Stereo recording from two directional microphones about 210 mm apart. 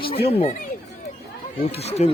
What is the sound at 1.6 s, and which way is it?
Speech, 30° left (ahead or behind).